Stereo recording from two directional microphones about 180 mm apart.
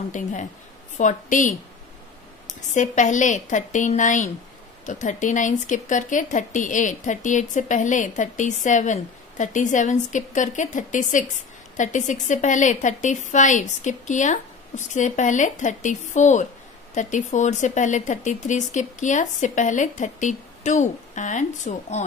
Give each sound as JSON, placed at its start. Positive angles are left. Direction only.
{"t": 0.1, "sound": "speech", "side_deg": 45}